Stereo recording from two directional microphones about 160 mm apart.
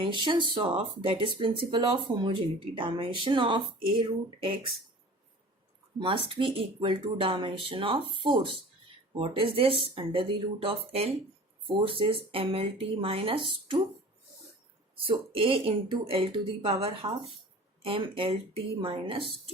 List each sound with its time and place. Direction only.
0.0 s speech: 30° right (ahead or behind)
6.0 s speech: 35° right (ahead or behind)
14.9 s speech: 35° right (ahead or behind)